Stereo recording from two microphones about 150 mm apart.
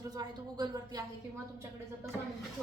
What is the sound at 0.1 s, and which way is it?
Speech, 25° right (ahead or behind).